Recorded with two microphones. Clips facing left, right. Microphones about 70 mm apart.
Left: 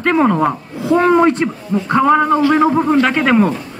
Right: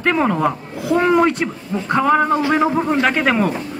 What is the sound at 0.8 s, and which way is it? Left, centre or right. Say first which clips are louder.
Speech: left 3 dB; left.